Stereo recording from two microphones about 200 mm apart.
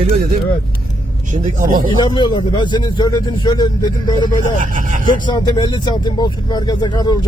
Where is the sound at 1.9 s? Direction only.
20° left (ahead or behind).